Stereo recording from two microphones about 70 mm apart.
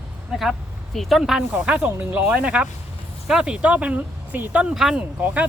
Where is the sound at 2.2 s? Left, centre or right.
Centre.